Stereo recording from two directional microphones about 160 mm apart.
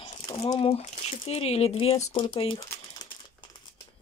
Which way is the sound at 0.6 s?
35° left (ahead or behind).